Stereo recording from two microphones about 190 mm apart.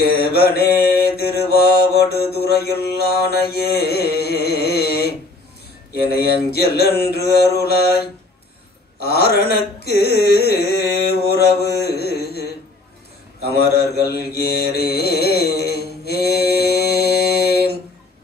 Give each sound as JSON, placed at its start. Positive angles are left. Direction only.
{"t": 0.2, "sound": "mantra", "side_deg": 55}
{"t": 9.8, "sound": "carnatic music", "side_deg": 55}
{"t": 13.6, "sound": "mantra", "side_deg": 55}